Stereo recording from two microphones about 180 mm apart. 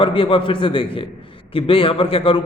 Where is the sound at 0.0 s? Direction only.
30° left (ahead or behind).